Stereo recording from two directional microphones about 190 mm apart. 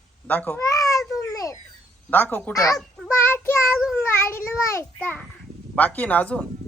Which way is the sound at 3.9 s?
15° left (ahead or behind).